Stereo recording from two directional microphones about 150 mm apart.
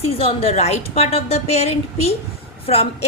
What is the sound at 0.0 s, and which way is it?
A woman's voice, 40° left (ahead or behind).